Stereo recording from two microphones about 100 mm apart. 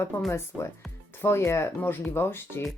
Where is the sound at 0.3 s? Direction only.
25° left (ahead or behind).